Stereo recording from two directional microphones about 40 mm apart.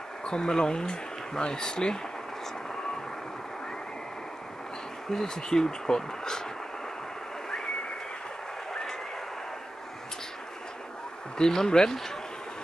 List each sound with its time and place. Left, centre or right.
0.2 s speech: centre
5.1 s speech: centre
11.3 s speech: centre